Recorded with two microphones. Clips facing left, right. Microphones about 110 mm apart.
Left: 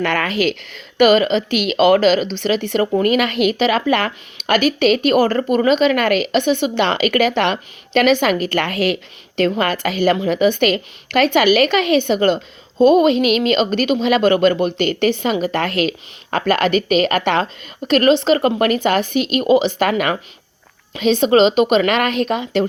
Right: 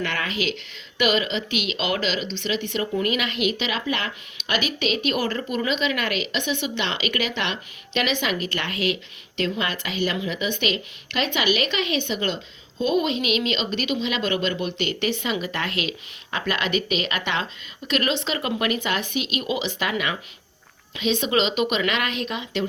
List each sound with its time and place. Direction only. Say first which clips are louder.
0.0 s speech: left 9 dB; 55° left (ahead or behind)